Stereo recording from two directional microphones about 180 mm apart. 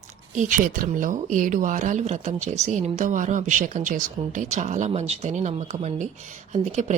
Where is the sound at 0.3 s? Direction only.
45° right (ahead or behind).